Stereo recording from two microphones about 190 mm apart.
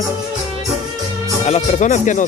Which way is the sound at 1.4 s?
35° left (ahead or behind).